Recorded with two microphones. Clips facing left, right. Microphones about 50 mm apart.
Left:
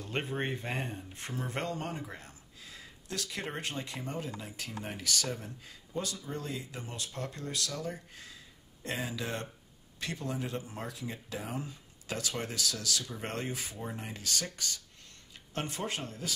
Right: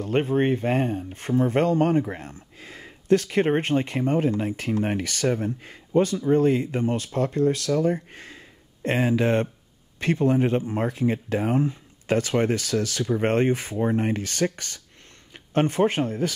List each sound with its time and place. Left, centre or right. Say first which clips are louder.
0.1 s speech: right 13 dB; right